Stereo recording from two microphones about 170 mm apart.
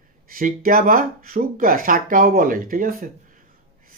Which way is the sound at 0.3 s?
55° right (ahead or behind).